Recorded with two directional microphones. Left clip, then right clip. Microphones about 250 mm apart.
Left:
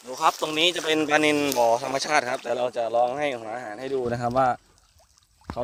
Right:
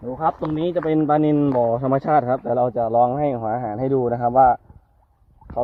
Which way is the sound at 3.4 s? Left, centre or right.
Left.